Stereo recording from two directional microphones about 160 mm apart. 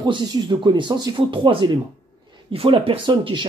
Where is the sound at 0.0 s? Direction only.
25° right (ahead or behind).